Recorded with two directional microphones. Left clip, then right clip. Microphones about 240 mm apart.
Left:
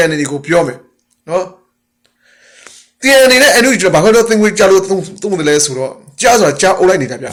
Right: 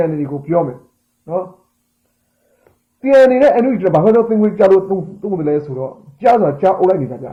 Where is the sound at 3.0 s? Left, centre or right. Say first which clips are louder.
Left 2 dB; centre.